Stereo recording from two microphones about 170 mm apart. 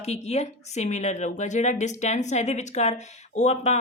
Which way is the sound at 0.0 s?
40° left (ahead or behind).